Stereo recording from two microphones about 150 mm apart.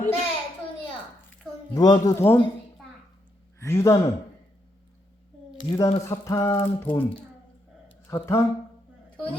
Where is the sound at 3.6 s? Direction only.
20° left (ahead or behind).